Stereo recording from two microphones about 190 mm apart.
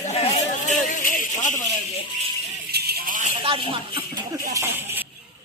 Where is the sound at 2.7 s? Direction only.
55° right (ahead or behind).